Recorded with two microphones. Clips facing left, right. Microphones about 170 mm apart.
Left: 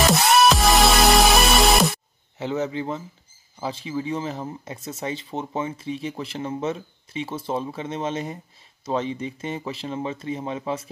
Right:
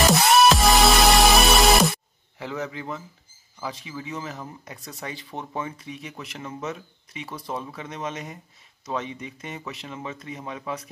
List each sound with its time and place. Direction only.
0.0 s music: centre (ahead or behind)
2.3 s speech: 25° left (ahead or behind)